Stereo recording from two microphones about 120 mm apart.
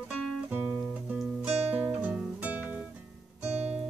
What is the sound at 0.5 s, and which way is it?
Guitar, 10° right (ahead or behind).